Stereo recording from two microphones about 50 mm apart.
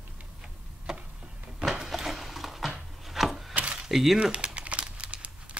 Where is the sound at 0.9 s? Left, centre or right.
Centre.